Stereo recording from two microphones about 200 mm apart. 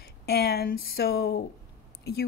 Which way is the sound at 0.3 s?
50° left (ahead or behind).